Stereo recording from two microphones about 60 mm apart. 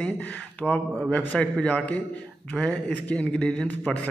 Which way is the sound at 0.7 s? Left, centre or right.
Centre.